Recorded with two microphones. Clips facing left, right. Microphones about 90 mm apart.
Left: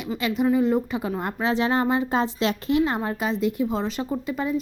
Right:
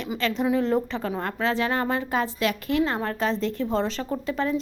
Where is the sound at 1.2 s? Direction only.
15° left (ahead or behind).